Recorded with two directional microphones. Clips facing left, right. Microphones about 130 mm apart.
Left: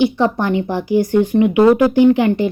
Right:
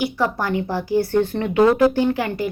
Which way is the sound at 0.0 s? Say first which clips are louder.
Left 6 dB; 20° left (ahead or behind).